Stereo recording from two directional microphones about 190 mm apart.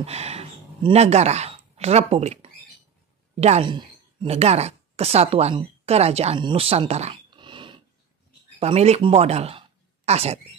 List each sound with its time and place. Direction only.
0.0 s speech: 35° right (ahead or behind)